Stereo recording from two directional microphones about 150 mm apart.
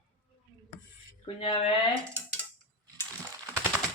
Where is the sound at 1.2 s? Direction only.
35° left (ahead or behind).